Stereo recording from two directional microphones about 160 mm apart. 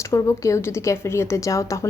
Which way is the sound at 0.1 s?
20° left (ahead or behind).